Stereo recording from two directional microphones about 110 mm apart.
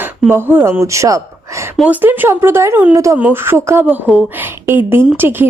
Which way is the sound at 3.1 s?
15° right (ahead or behind).